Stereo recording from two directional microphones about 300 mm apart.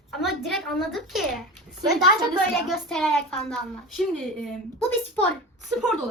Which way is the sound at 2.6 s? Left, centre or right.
Centre.